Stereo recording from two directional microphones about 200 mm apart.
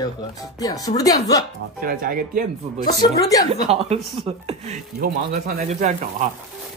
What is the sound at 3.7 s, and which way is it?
Speech, 30° right (ahead or behind).